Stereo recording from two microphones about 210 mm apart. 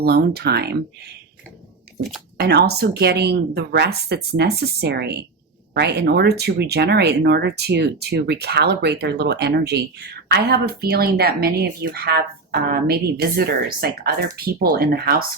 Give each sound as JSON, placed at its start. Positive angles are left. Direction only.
{"t": 0.0, "sound": "speech", "side_deg": -50}
{"t": 2.4, "sound": "speech", "side_deg": -50}